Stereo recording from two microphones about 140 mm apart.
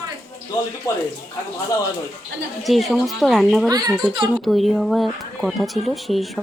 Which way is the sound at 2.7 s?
Centre (ahead or behind).